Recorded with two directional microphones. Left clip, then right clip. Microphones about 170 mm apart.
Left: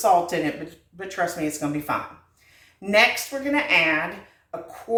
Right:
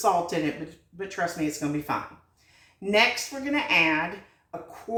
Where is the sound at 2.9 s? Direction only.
25° left (ahead or behind).